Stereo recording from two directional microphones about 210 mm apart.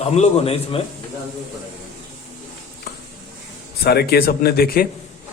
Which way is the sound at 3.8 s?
50° left (ahead or behind).